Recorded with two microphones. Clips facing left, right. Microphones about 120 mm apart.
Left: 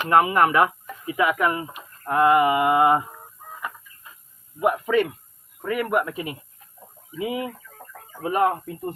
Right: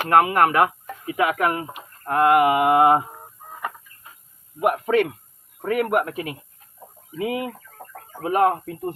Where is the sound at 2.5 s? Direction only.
20° right (ahead or behind).